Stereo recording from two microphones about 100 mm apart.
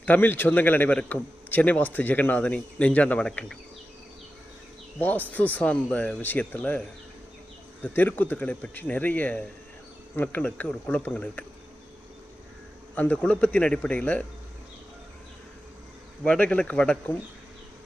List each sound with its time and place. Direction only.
0.0 s a man's voice: 20° left (ahead or behind)
4.9 s a man's voice: 15° left (ahead or behind)
13.0 s a man's voice: 15° left (ahead or behind)
16.2 s a man's voice: 10° left (ahead or behind)